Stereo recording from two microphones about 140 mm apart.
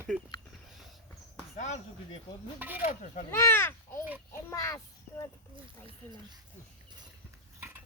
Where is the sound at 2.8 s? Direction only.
60° left (ahead or behind).